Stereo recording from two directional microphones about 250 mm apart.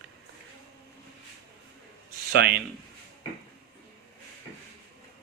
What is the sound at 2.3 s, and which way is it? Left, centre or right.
Speech, right.